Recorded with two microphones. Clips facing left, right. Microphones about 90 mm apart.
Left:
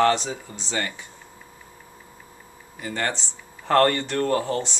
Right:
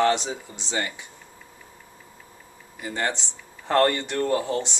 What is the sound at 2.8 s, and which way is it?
Speech, 15° right (ahead or behind).